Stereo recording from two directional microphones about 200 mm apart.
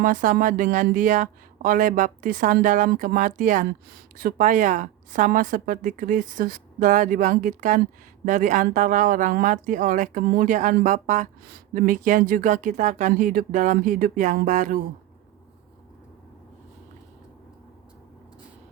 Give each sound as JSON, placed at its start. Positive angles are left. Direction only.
{"t": 0.0, "sound": "speech", "side_deg": -40}